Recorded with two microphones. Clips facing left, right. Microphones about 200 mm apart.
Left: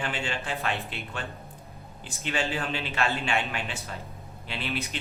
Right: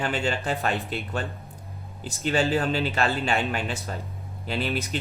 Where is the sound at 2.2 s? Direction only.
40° right (ahead or behind).